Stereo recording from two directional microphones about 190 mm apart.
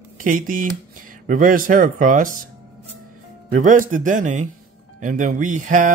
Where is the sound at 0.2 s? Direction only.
45° right (ahead or behind).